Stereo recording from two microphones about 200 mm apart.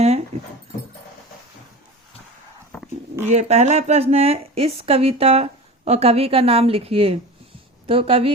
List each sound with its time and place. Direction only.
0.0 s dog: 35° right (ahead or behind)
3.2 s speech: 35° right (ahead or behind)